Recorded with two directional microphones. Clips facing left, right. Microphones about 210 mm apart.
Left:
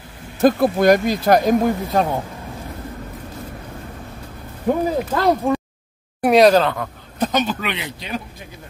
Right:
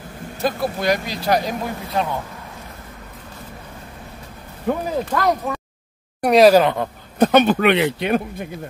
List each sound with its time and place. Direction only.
0.4 s speech: 50° left (ahead or behind)
5.1 s speech: 30° left (ahead or behind)
6.2 s speech: centre (ahead or behind)
6.6 s speech: 20° right (ahead or behind)
7.2 s speech: 60° right (ahead or behind)